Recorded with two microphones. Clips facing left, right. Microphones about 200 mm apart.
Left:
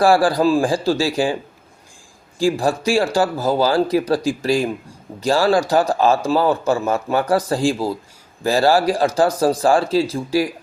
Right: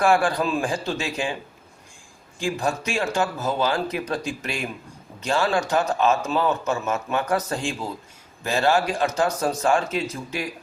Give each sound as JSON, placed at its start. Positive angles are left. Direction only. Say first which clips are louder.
{"t": 0.0, "sound": "a man's voice", "louder": "left 6 dB", "side_deg": 35}
{"t": 2.4, "sound": "a man's voice", "louder": "left 7 dB", "side_deg": 35}